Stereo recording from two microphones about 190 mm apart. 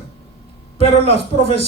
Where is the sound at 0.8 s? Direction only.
30° left (ahead or behind).